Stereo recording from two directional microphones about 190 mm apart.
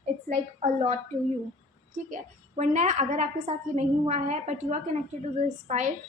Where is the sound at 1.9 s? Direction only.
40° right (ahead or behind).